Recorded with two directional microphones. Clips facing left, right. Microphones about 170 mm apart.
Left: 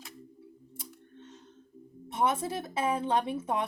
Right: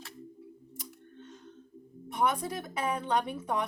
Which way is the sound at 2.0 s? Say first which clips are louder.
Left 1 dB; 25° left (ahead or behind).